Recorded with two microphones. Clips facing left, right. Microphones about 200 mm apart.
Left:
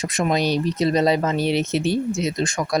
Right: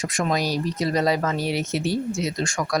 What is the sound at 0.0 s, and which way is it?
Speech, 20° left (ahead or behind).